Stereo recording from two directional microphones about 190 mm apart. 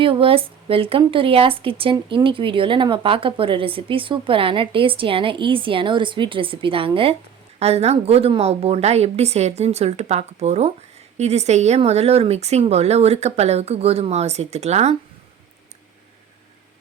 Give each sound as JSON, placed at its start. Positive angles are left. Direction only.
{"t": 0.0, "sound": "a woman's voice", "side_deg": -30}